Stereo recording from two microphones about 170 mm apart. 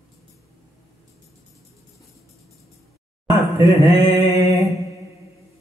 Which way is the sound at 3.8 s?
20° right (ahead or behind).